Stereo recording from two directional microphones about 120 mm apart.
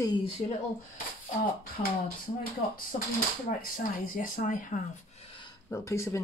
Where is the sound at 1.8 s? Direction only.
70° left (ahead or behind).